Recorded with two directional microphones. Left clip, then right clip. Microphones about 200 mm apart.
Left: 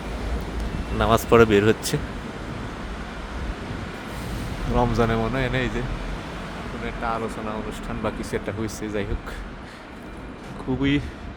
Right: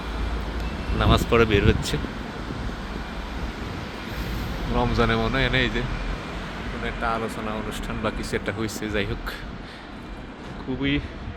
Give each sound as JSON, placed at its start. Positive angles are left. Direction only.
{"t": 0.9, "sound": "speech", "side_deg": 25}
{"t": 4.7, "sound": "speech", "side_deg": 20}
{"t": 6.8, "sound": "speech", "side_deg": 5}
{"t": 10.7, "sound": "speech", "side_deg": 40}